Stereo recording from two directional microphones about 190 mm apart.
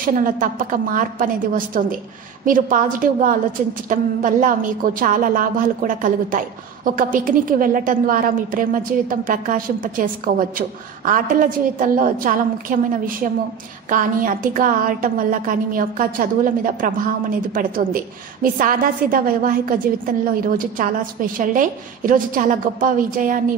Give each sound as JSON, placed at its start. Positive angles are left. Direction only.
{"t": 0.0, "sound": "a woman's voice", "side_deg": -45}